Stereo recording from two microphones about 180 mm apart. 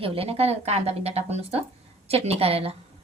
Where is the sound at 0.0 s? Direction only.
30° right (ahead or behind).